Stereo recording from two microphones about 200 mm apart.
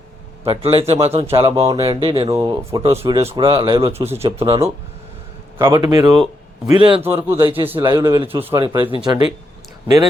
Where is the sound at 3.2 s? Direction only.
30° right (ahead or behind).